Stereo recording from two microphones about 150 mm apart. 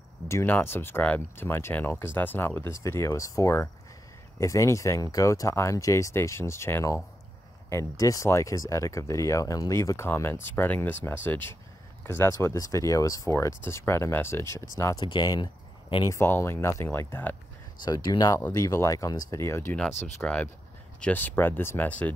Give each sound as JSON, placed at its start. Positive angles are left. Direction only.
{"t": 0.3, "sound": "speech", "side_deg": 15}
{"t": 16.2, "sound": "speech", "side_deg": 15}
{"t": 17.8, "sound": "speech", "side_deg": 25}